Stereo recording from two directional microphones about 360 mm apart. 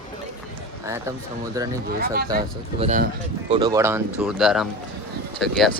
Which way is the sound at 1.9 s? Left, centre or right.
Right.